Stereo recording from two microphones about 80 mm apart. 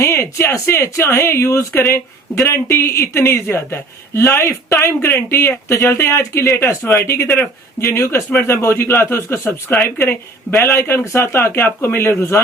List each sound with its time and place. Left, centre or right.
0.0 s speech: left